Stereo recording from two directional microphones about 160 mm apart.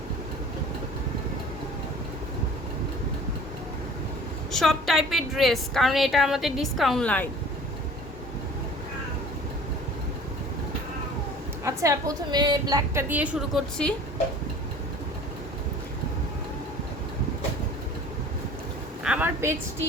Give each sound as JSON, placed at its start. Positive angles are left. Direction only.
{"t": 4.5, "sound": "a woman's voice", "side_deg": 0}
{"t": 11.6, "sound": "a woman's voice", "side_deg": -20}
{"t": 19.0, "sound": "a sound", "side_deg": -10}